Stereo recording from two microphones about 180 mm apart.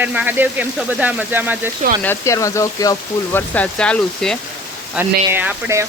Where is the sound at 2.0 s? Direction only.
15° left (ahead or behind).